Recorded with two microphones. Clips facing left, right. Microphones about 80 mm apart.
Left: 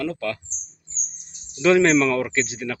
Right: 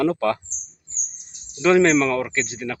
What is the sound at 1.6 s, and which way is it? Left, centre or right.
Speech, centre.